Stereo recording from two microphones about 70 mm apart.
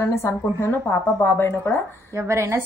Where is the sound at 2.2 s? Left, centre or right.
Right.